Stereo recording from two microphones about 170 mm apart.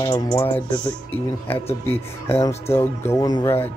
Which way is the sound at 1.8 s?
15° left (ahead or behind).